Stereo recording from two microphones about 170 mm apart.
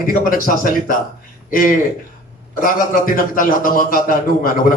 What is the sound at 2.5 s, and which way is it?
A man's voice, 55° left (ahead or behind).